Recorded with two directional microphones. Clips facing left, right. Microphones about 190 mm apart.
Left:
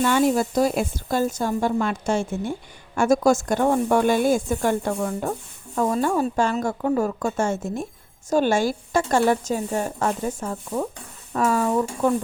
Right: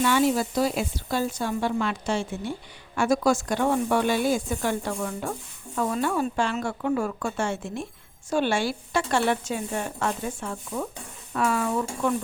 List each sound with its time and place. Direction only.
0.0 s a woman's voice: 45° left (ahead or behind)